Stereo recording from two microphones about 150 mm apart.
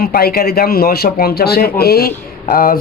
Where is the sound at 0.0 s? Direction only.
90° left.